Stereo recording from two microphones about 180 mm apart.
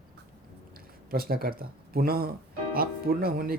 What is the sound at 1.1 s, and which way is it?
Speech, 55° right (ahead or behind).